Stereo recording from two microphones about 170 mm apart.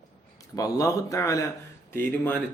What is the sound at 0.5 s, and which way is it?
Speech, 20° left (ahead or behind).